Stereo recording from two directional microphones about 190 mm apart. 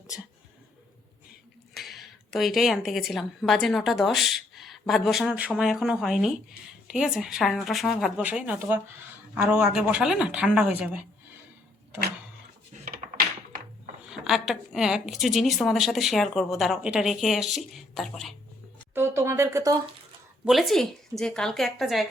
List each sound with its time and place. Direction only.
1.7 s a woman's voice: centre (ahead or behind)
12.8 s typing: 50° right (ahead or behind)
14.1 s a woman's voice: centre (ahead or behind)
18.9 s speech: 15° right (ahead or behind)
20.4 s a woman's voice: centre (ahead or behind)